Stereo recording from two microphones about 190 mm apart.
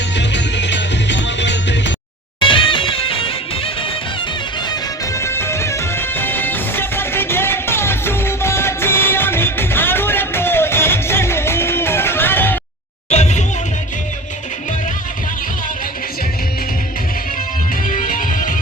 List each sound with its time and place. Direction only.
0.2 s music: 65° left (ahead or behind)
2.4 s music: 25° left (ahead or behind)
4.7 s music: 15° left (ahead or behind)
13.1 s music: 35° left (ahead or behind)
17.8 s music: 45° left (ahead or behind)